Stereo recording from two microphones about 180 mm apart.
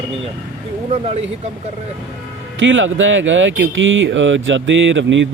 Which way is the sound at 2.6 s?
90° right.